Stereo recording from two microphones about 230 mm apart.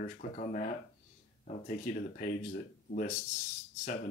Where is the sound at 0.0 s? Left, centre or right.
Left.